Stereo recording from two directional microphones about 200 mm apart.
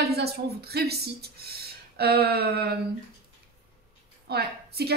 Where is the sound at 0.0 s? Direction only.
55° right (ahead or behind).